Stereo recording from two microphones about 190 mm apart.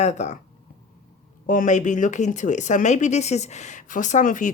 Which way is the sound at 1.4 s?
45° left (ahead or behind).